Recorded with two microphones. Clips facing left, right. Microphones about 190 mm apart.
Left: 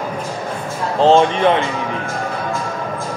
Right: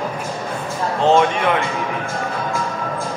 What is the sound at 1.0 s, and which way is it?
Speech, 30° left (ahead or behind).